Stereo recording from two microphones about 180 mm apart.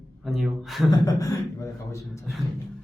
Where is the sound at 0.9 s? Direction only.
20° left (ahead or behind).